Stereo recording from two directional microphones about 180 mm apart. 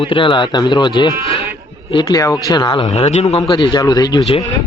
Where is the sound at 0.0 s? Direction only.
30° left (ahead or behind).